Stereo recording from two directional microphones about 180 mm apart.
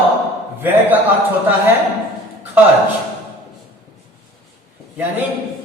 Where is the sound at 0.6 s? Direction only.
10° right (ahead or behind).